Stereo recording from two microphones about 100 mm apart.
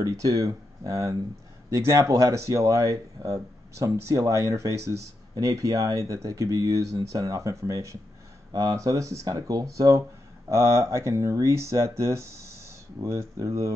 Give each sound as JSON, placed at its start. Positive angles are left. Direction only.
{"t": 0.0, "sound": "speech", "side_deg": -35}